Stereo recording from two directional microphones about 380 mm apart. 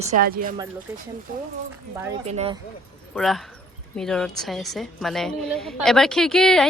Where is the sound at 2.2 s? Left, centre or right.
Centre.